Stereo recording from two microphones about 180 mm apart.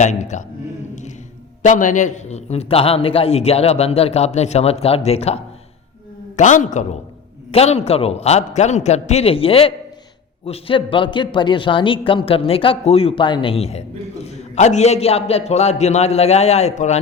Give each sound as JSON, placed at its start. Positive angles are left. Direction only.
{"t": 0.0, "sound": "speech", "side_deg": 40}
{"t": 1.6, "sound": "speech", "side_deg": 45}